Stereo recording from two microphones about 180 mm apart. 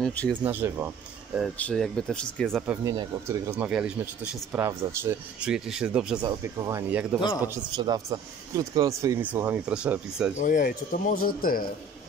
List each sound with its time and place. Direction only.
0.0 s speech: 5° left (ahead or behind)
0.4 s speech: 10° right (ahead or behind)
1.6 s speech: 5° left (ahead or behind)
2.6 s speech: 15° right (ahead or behind)
7.4 s speech: 20° right (ahead or behind)
10.3 s speech: 45° left (ahead or behind)